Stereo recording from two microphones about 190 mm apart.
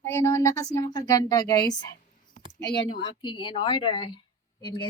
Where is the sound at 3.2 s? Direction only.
25° left (ahead or behind).